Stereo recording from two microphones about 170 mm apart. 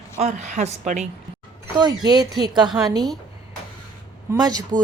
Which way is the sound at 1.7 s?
25° right (ahead or behind).